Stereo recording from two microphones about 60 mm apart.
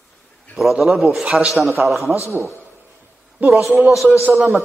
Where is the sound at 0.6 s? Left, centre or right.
Centre.